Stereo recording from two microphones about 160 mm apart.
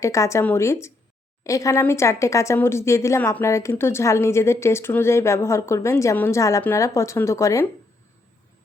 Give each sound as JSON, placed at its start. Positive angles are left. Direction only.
{"t": 0.0, "sound": "speech", "side_deg": 20}